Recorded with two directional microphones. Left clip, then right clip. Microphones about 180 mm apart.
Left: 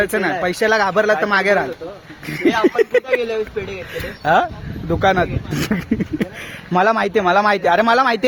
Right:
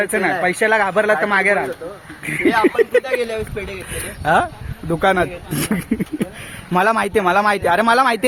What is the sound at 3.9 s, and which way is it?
Speech, 5° left (ahead or behind).